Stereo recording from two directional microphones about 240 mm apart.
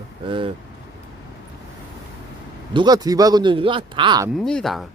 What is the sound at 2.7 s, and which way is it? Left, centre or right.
Speech, centre.